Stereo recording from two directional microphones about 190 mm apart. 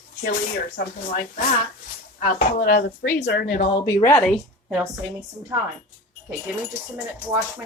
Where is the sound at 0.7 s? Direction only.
50° left (ahead or behind).